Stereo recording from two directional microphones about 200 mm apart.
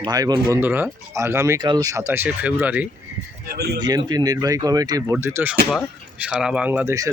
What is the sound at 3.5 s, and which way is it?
Speech, 55° right (ahead or behind).